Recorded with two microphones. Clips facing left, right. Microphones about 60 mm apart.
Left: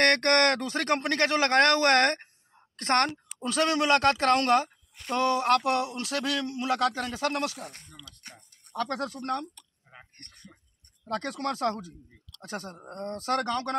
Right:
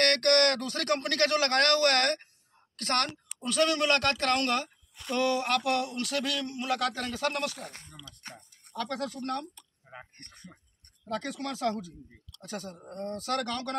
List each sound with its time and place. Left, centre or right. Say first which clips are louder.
0.0 s speech: left 2 dB; left
7.9 s speech: even; centre
8.7 s a man's voice: left 3 dB; left
9.6 s a sound: right 4 dB; centre
11.1 s a man's voice: left 3 dB; left